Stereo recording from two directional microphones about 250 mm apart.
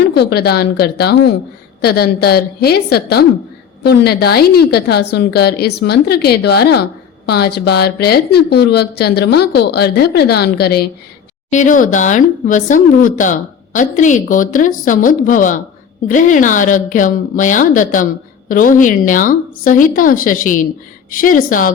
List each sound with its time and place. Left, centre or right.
0.1 s a woman's voice: left